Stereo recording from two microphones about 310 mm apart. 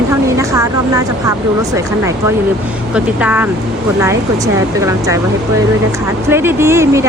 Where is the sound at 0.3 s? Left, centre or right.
Centre.